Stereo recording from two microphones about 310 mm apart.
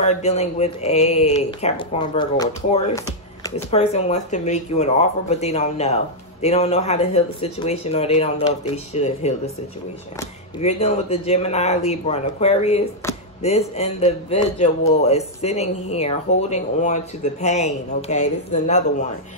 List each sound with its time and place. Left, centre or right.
0.0 s a man's voice: left
10.6 s a man's voice: left